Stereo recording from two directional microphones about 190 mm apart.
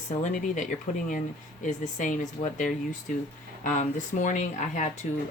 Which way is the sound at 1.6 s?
40° left (ahead or behind).